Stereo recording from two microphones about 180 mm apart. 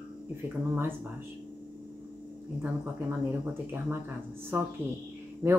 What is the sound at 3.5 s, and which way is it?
Speech, 10° right (ahead or behind).